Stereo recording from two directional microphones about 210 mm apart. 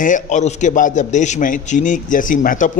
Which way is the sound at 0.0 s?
35° left (ahead or behind).